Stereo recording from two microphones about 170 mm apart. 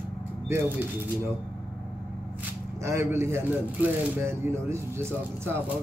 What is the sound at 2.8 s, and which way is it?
Speech, 15° right (ahead or behind).